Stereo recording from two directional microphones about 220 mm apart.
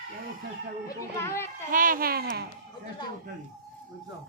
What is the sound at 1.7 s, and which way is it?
Speech, 40° right (ahead or behind).